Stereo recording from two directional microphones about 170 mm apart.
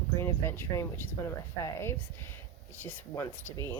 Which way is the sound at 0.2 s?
15° left (ahead or behind).